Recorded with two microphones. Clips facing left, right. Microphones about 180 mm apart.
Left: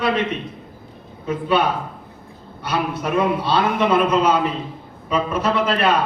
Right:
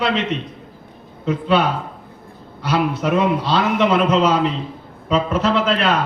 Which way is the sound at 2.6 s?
55° left (ahead or behind).